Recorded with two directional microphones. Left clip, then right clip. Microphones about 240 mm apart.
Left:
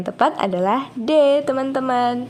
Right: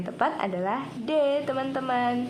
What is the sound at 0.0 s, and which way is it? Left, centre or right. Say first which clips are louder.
A woman's voice: left 8 dB; left.